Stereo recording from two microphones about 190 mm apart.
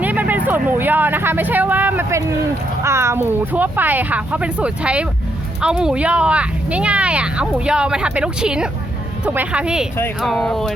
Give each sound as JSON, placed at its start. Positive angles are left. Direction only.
{"t": 0.0, "sound": "speech", "side_deg": -10}